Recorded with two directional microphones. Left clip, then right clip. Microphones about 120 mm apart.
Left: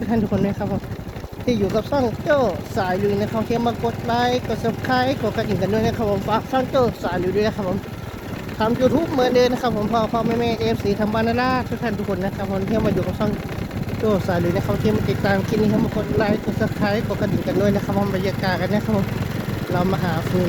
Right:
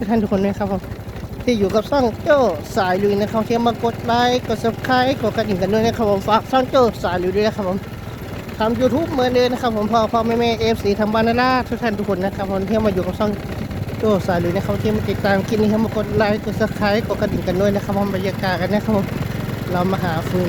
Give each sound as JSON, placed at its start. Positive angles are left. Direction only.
{"t": 0.1, "sound": "speech", "side_deg": -30}
{"t": 8.5, "sound": "speech", "side_deg": 5}
{"t": 9.9, "sound": "speech", "side_deg": -15}
{"t": 16.1, "sound": "speech", "side_deg": -30}
{"t": 17.6, "sound": "speech", "side_deg": -10}